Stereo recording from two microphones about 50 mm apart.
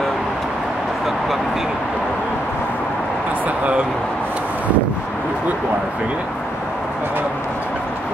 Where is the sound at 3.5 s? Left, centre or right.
Right.